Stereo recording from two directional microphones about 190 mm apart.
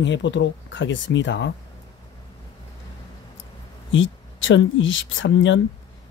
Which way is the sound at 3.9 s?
80° left.